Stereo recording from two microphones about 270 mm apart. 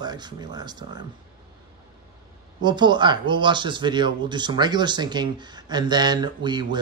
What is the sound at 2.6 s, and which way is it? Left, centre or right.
Speech, centre.